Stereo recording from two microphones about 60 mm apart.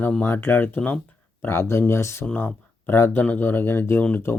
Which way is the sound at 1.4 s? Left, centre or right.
Left.